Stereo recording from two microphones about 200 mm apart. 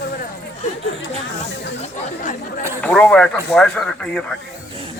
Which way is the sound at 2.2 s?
40° left (ahead or behind).